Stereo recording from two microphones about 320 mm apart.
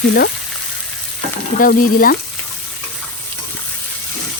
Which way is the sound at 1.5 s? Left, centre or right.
Left.